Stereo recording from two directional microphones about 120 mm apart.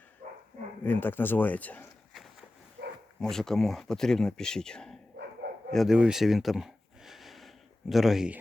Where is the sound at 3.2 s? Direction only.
5° left (ahead or behind).